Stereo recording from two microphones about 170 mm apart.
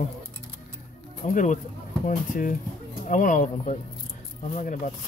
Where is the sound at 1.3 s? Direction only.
50° left (ahead or behind).